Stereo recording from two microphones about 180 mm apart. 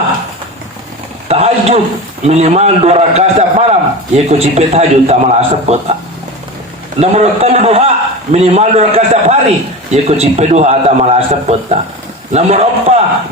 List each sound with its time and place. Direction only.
1.3 s a man's voice: 35° right (ahead or behind)
7.0 s a man's voice: 35° right (ahead or behind)